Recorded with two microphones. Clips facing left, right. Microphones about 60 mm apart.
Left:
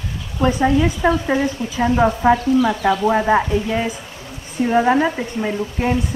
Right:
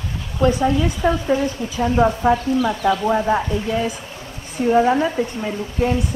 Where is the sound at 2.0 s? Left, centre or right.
Left.